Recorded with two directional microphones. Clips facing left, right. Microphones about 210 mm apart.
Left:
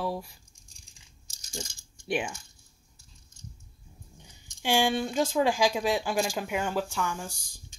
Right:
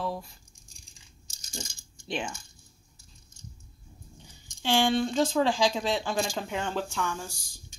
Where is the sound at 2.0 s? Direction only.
15° left (ahead or behind).